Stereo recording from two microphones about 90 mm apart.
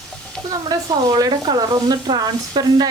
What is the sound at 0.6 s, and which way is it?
Speech, 45° right (ahead or behind).